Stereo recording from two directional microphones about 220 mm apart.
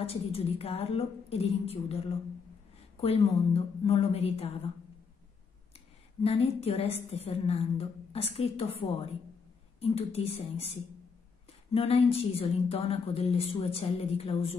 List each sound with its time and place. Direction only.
0.0 s a woman's voice: 25° left (ahead or behind)
6.2 s a woman's voice: 25° left (ahead or behind)